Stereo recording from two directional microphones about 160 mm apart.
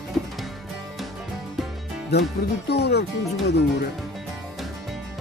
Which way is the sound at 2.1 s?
90° left.